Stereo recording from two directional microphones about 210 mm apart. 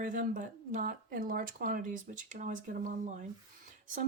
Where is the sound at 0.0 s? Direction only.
40° right (ahead or behind).